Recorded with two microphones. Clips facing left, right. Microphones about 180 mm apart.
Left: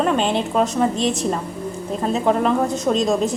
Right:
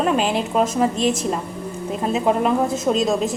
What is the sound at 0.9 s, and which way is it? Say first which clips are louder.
Speech: right 1 dB; 35° left (ahead or behind).